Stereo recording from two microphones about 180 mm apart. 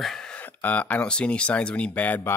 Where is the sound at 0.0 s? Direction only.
5° left (ahead or behind).